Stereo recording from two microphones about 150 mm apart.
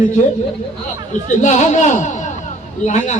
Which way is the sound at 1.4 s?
50° left (ahead or behind).